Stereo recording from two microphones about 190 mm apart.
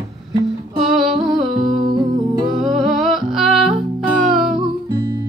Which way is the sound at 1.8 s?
25° right (ahead or behind).